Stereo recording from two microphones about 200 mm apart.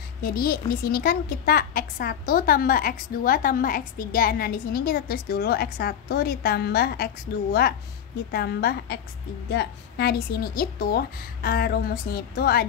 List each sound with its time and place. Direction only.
0.2 s a woman's voice: 50° left (ahead or behind)